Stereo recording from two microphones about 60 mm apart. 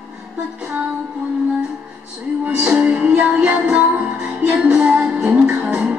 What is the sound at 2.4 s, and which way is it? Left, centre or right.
Music, right.